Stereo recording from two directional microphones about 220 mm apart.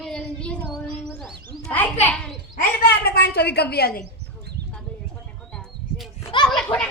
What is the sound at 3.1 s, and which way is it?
Speech, 45° left (ahead or behind).